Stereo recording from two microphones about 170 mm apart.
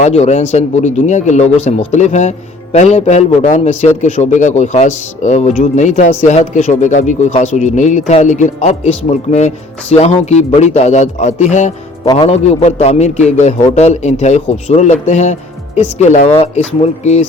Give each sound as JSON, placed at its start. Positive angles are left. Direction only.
{"t": 0.0, "sound": "a man's voice", "side_deg": 40}
{"t": 12.0, "sound": "a man's voice", "side_deg": 35}